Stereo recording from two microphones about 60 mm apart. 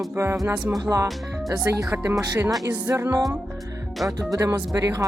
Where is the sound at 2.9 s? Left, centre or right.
Right.